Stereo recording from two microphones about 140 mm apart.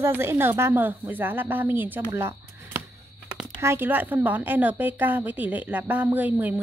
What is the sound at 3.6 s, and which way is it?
A woman's voice, 15° right (ahead or behind).